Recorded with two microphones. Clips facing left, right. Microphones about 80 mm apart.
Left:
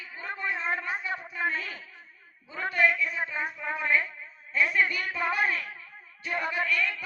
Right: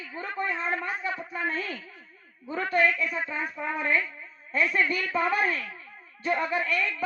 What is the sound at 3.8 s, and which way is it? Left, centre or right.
Speech, left.